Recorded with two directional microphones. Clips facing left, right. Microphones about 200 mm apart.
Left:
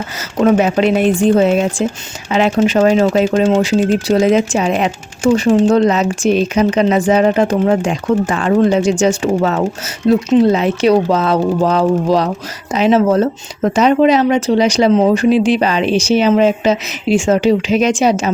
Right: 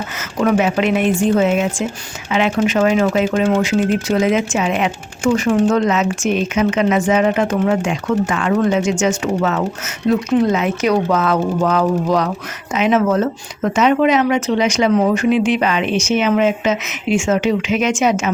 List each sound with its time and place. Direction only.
0.3 s speech: 35° left (ahead or behind)